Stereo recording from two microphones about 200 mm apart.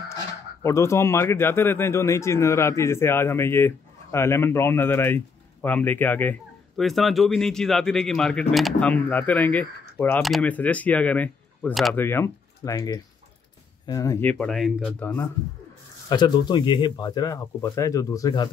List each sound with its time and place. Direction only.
0.1 s speech: 15° left (ahead or behind)
14.4 s speech: centre (ahead or behind)
16.1 s speech: 20° left (ahead or behind)